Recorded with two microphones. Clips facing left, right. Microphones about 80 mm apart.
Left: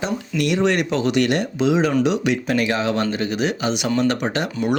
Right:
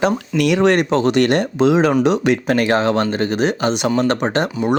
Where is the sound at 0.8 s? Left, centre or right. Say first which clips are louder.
Right 4 dB; right.